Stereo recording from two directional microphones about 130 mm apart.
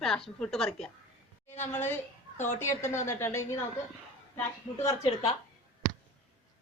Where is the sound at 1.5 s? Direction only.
15° left (ahead or behind).